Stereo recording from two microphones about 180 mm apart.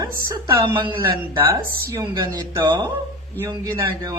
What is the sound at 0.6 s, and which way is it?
Speech, 25° right (ahead or behind).